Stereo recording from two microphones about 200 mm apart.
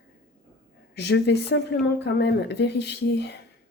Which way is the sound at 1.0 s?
60° left (ahead or behind).